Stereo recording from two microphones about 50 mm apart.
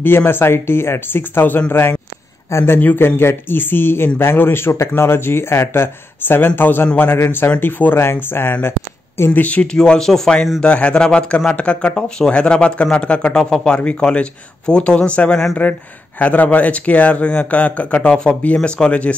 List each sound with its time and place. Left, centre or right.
0.0 s speech: left
2.6 s a man's voice: left
3.2 s speech: left
8.6 s a sound: left
9.3 s a man's voice: left
9.7 s speech: centre
10.6 s speech: left
13.4 s speech: centre
13.7 s a man's voice: left